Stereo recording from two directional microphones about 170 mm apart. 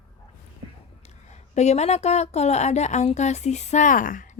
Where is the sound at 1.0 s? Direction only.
40° left (ahead or behind).